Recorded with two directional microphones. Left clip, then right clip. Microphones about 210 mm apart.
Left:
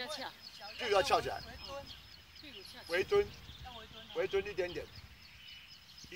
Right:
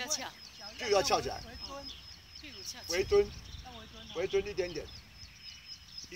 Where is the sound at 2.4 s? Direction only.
35° right (ahead or behind).